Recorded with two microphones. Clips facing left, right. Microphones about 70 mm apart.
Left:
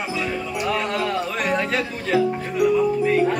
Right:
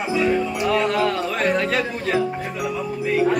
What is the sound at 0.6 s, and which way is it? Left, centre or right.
Speech, centre.